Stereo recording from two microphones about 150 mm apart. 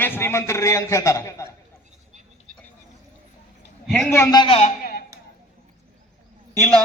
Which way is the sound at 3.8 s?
Centre (ahead or behind).